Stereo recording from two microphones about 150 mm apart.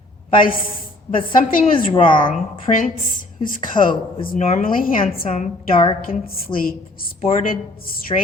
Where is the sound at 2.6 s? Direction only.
60° left (ahead or behind).